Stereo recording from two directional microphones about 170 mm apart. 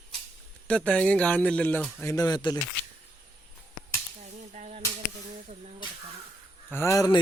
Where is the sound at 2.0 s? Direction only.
20° left (ahead or behind).